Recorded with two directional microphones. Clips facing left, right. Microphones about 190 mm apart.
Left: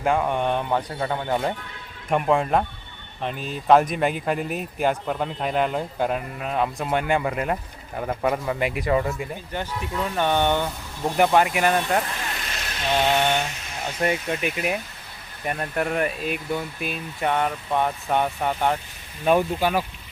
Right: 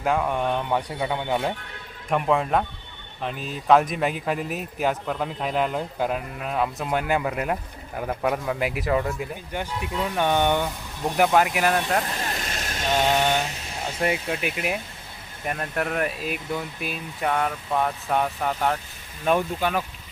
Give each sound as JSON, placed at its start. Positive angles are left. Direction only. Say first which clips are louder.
{"t": 0.0, "sound": "speech", "louder": "left 1 dB", "side_deg": 0}
{"t": 9.5, "sound": "speech", "louder": "even", "side_deg": -10}
{"t": 12.5, "sound": "vehicle", "louder": "right 1 dB", "side_deg": -45}
{"t": 13.1, "sound": "speech", "louder": "even", "side_deg": -5}